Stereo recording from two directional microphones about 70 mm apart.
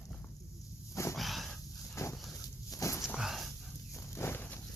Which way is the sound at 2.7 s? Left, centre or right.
Left.